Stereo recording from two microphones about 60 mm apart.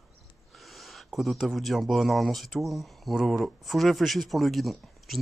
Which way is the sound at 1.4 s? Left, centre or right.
Centre.